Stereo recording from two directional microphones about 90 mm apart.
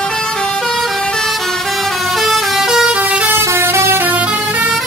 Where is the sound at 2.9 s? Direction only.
15° right (ahead or behind).